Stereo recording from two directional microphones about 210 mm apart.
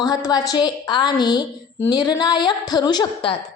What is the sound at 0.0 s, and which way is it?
A woman's voice, 20° left (ahead or behind).